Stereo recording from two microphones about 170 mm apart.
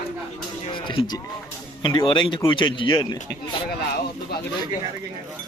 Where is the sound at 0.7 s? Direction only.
30° left (ahead or behind).